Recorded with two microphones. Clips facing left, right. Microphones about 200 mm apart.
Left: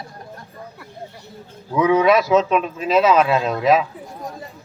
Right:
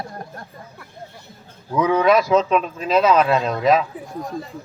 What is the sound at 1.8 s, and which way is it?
Speech, centre (ahead or behind).